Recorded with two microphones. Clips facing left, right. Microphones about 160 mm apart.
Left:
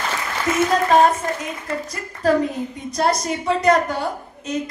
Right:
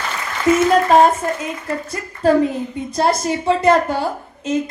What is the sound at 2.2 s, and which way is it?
A woman's voice, 30° right (ahead or behind).